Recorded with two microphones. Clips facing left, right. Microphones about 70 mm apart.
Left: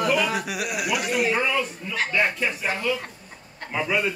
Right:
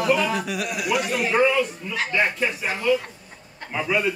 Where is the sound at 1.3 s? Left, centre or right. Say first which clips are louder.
Right 5 dB; centre.